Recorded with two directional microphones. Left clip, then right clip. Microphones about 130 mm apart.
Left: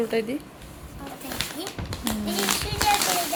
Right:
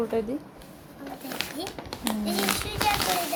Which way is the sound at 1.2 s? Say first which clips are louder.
Left 2 dB; 30° right (ahead or behind).